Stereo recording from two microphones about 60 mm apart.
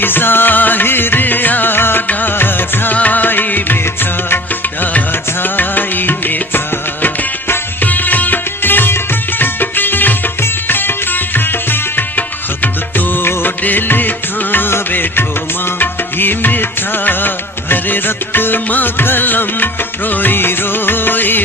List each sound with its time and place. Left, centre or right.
0.0 s music: left
4.8 s music: left
13.2 s music of bollywood: left
14.5 s music: left